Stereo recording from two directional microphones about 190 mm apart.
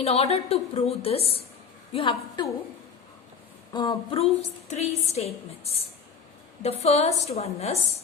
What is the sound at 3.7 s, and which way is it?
A woman's voice, 25° left (ahead or behind).